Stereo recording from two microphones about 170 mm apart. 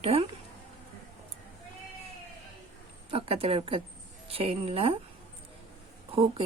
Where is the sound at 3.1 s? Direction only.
35° right (ahead or behind).